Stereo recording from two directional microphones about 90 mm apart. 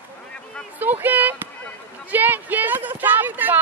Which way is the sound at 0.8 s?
20° right (ahead or behind).